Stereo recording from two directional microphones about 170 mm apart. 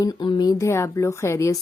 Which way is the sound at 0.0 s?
25° left (ahead or behind).